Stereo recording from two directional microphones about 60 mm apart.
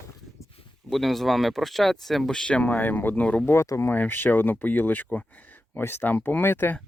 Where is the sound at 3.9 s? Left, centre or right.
Left.